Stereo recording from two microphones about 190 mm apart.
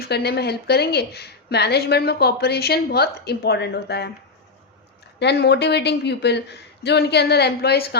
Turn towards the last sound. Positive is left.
turn(degrees=55)  # may be behind; listen again after turning